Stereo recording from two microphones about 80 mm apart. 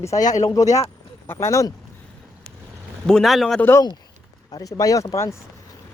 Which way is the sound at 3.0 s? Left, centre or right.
Centre.